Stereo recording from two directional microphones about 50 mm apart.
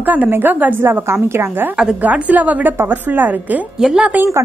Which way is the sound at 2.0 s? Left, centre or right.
Right.